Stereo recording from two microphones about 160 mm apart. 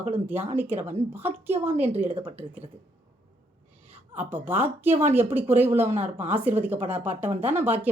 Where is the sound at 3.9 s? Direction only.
10° right (ahead or behind).